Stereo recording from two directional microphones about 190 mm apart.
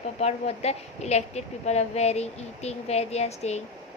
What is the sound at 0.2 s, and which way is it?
A woman's voice, 35° left (ahead or behind).